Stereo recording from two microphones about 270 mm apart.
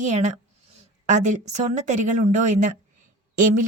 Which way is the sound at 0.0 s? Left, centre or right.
Right.